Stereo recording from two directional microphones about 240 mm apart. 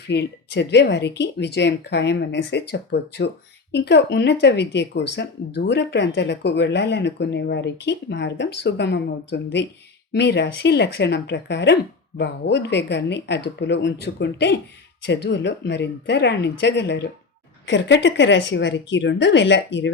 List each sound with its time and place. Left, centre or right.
0.1 s speech: left